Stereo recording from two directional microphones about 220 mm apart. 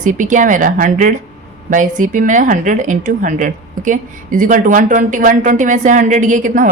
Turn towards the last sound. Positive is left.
turn(degrees=-35)  # may be behind; listen again after turning